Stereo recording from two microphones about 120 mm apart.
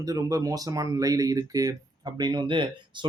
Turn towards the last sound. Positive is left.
turn(degrees=-40)  # may be behind; listen again after turning